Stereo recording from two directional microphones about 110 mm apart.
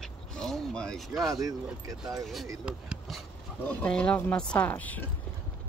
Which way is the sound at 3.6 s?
10° left (ahead or behind).